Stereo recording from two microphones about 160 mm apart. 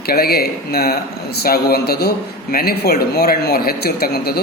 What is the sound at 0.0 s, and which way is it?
Speech, 75° left (ahead or behind).